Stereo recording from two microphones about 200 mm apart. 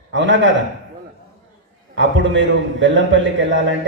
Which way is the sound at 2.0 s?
65° right (ahead or behind).